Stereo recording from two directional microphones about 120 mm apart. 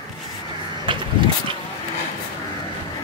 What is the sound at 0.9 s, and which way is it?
Vehicle, 45° right (ahead or behind).